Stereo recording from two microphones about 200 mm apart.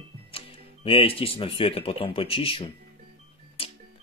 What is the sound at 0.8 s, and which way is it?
Speech, 30° left (ahead or behind).